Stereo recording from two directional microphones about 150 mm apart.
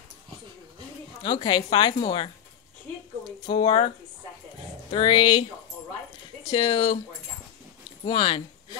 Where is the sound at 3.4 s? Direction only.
35° left (ahead or behind).